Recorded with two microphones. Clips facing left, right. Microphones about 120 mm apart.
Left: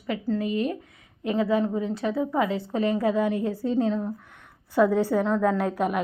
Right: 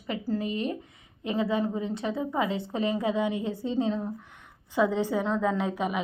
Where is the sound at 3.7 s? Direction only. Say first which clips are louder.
Left 2 dB; centre (ahead or behind).